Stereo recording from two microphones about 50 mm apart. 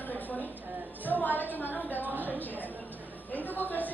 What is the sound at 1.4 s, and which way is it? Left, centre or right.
Speech, left.